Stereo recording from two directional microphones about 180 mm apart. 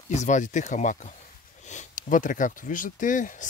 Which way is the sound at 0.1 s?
40° left (ahead or behind).